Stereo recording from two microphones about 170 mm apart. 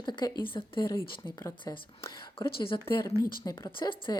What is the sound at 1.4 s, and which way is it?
Speech, 15° left (ahead or behind).